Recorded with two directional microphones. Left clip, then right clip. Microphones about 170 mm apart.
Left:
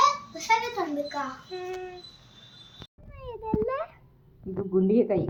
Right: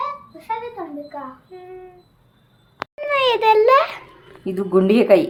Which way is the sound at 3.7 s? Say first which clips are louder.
Right 17 dB; 5° right (ahead or behind).